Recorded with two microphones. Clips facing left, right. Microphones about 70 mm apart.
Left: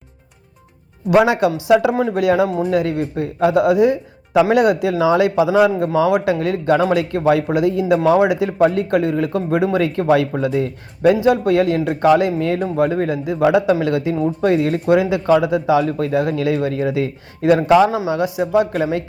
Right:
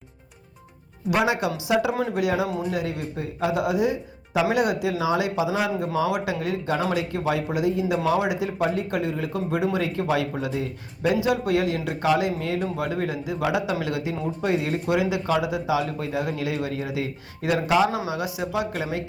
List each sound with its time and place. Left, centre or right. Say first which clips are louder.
1.1 s speech: left 9 dB; left